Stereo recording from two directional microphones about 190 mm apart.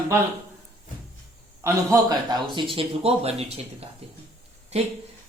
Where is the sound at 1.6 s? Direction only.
15° right (ahead or behind); by 3.8 s 30° right (ahead or behind).